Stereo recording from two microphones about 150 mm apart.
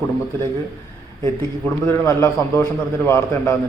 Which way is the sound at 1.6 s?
15° left (ahead or behind).